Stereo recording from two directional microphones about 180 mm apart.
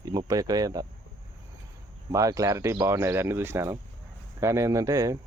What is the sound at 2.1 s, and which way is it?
Speech, 20° right (ahead or behind).